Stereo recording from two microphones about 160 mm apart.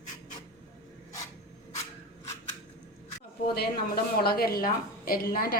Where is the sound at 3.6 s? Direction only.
70° left (ahead or behind).